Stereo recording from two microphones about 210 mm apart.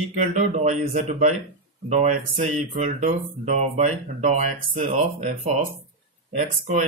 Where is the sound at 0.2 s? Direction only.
35° right (ahead or behind).